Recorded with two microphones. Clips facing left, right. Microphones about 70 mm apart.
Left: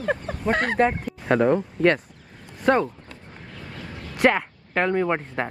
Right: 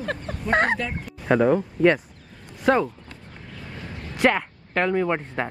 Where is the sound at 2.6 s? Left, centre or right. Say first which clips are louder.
Even; centre.